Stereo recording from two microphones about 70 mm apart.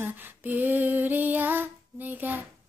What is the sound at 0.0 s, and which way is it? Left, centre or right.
Female singing, right.